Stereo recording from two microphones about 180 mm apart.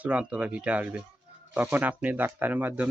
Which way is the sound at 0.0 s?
10° right (ahead or behind).